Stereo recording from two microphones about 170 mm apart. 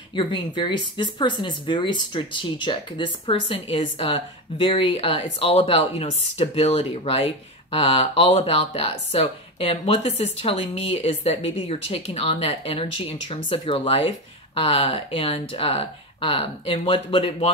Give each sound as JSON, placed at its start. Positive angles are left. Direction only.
{"t": 0.1, "sound": "speech", "side_deg": 30}